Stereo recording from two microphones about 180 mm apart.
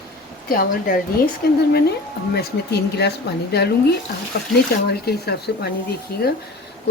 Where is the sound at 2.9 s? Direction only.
65° left (ahead or behind).